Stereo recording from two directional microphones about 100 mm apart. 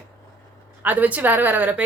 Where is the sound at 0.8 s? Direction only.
15° right (ahead or behind).